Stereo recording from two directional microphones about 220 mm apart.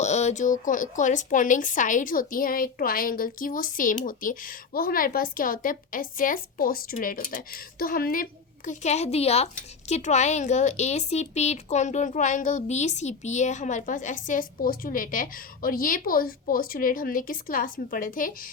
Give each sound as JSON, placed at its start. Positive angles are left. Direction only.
{"t": 0.0, "sound": "speech", "side_deg": 30}